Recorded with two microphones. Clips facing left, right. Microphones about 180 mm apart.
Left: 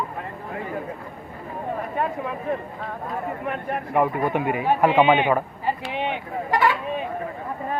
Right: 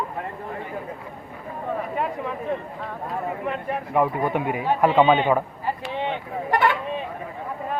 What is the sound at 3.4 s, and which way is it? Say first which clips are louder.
Speech: even; 5° left (ahead or behind).